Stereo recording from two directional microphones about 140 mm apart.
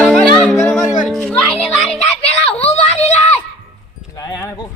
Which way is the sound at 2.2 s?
45° left (ahead or behind).